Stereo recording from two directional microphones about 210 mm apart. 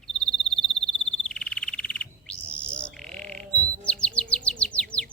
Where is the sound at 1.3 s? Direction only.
5° left (ahead or behind).